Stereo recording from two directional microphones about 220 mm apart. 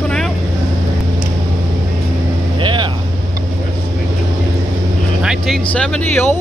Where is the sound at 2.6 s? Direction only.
20° right (ahead or behind).